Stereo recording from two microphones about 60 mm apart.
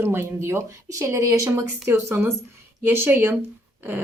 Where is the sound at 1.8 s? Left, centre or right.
Right.